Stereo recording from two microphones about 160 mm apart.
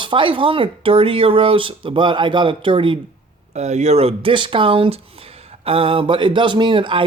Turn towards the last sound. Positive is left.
turn(degrees=-30)  # may be behind; listen again after turning